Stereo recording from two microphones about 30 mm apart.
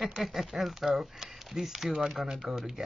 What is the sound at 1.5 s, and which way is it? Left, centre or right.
Speech, centre.